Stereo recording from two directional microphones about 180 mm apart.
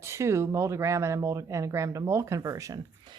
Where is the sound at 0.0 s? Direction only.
15° right (ahead or behind).